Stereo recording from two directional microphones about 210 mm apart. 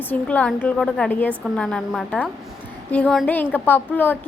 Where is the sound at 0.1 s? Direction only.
5° left (ahead or behind).